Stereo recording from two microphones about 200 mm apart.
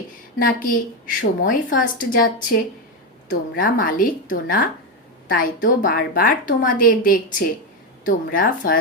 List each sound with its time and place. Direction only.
0.3 s a woman's voice: 45° left (ahead or behind)